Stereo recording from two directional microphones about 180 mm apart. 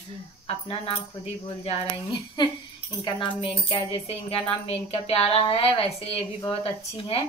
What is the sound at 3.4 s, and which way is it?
Speech, 25° left (ahead or behind).